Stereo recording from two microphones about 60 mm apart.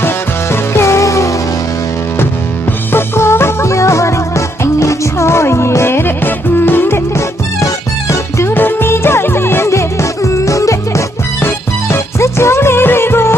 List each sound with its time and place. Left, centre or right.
0.5 s music: left
2.9 s music: left
8.1 s music: left
8.5 s music: left
11.3 s music: left